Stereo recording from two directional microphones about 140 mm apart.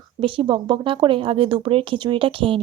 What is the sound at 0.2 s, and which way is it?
Speech, 40° right (ahead or behind).